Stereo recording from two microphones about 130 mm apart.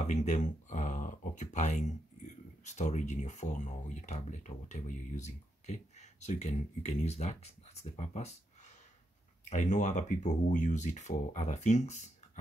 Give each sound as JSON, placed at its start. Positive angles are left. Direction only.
{"t": 0.0, "sound": "speech", "side_deg": 65}
{"t": 9.5, "sound": "speech", "side_deg": 65}